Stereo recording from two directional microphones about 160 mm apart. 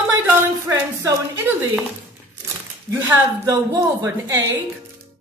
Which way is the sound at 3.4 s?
20° right (ahead or behind).